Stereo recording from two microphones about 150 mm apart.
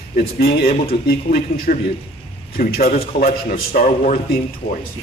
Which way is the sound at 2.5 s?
85° left.